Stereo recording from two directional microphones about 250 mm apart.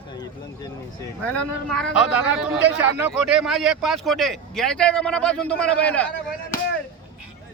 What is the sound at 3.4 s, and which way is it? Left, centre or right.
A man's voice, centre.